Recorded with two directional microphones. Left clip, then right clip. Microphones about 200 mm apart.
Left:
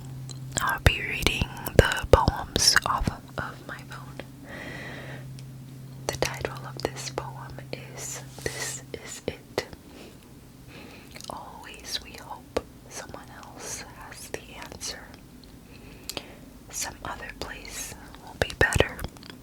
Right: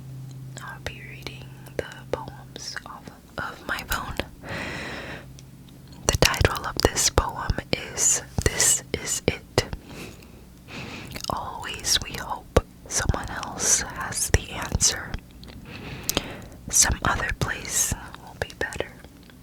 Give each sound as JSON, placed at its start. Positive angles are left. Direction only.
{"t": 0.5, "sound": "whispering", "side_deg": 55}
{"t": 3.4, "sound": "whispering", "side_deg": 5}
{"t": 3.8, "sound": "whispering", "side_deg": -70}
{"t": 4.4, "sound": "gasp", "side_deg": -35}
{"t": 6.1, "sound": "whispering", "side_deg": -40}
{"t": 6.4, "sound": "whispering", "side_deg": -60}
{"t": 10.7, "sound": "whispering", "side_deg": -50}
{"t": 18.6, "sound": "whispering", "side_deg": 25}